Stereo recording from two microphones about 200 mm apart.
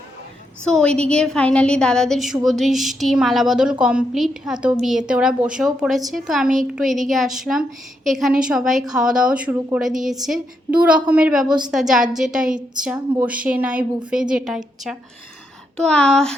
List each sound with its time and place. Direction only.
0.6 s a woman's voice: 5° left (ahead or behind)
11.4 s a woman's voice: 20° right (ahead or behind)
11.7 s a woman's voice: centre (ahead or behind)